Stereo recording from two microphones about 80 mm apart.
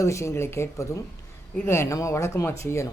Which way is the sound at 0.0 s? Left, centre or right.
Left.